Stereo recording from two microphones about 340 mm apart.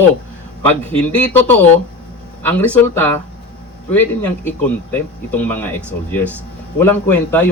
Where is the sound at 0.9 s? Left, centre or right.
Centre.